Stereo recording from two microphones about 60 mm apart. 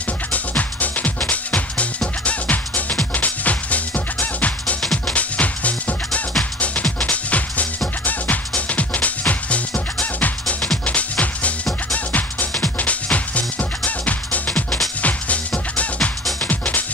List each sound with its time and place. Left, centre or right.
0.3 s music: left